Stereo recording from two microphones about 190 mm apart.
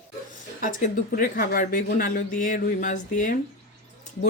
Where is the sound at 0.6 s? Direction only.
40° left (ahead or behind).